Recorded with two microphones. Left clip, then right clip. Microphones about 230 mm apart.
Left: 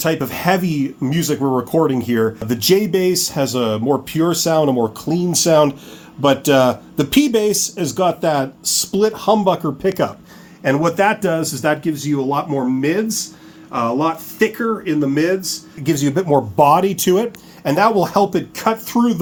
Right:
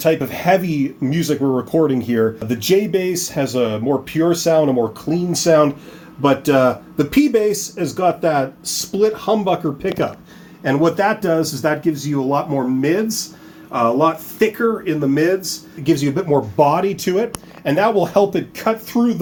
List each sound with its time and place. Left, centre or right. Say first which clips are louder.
0.0 s speech: right 2 dB; left
10.6 s speech: left 1 dB; left
15.8 s speech: even; left